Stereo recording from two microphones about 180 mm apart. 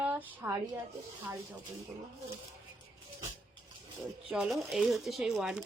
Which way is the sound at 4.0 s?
Centre (ahead or behind).